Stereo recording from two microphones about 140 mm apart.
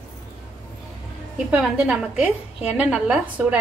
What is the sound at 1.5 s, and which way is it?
A woman's voice, 5° right (ahead or behind).